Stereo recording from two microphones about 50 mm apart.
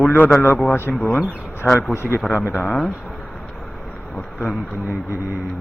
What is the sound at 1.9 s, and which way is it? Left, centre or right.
Speech, left.